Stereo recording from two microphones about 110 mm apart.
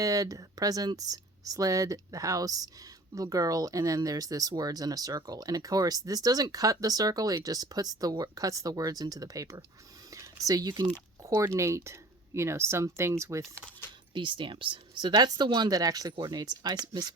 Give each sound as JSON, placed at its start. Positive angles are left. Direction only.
{"t": 0.0, "sound": "speech", "side_deg": -30}
{"t": 10.1, "sound": "a sound", "side_deg": -30}
{"t": 11.3, "sound": "speech", "side_deg": -25}
{"t": 14.1, "sound": "speech", "side_deg": -50}